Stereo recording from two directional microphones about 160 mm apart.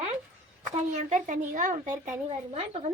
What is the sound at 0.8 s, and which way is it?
Speech, 50° right (ahead or behind).